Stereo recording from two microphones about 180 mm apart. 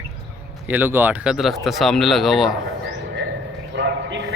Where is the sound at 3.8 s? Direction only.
75° right (ahead or behind).